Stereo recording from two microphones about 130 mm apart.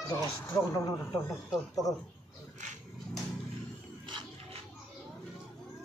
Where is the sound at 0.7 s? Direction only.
25° left (ahead or behind).